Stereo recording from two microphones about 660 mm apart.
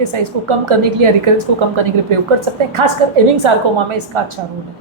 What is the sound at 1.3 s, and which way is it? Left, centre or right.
Speech, right.